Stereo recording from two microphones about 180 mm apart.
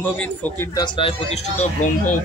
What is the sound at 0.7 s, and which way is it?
Speech, 25° left (ahead or behind).